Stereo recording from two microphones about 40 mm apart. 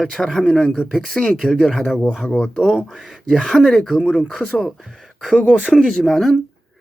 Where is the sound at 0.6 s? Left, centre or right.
Left.